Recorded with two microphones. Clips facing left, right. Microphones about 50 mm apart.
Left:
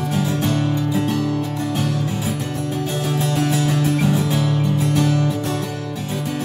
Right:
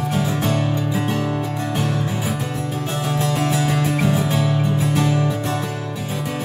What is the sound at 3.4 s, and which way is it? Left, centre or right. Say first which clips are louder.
Music: left 1 dB; centre.